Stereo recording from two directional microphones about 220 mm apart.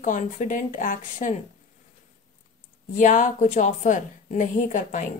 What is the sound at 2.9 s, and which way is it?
A woman's voice, 35° left (ahead or behind).